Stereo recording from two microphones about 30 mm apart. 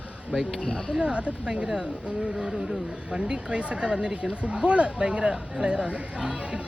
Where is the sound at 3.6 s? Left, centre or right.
Right.